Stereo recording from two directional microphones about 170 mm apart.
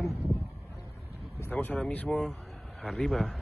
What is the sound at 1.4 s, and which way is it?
A man's voice, 10° left (ahead or behind).